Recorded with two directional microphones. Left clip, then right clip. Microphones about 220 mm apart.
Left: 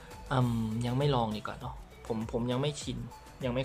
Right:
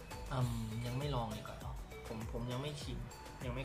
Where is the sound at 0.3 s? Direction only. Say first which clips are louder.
Left 12 dB; 45° left (ahead or behind).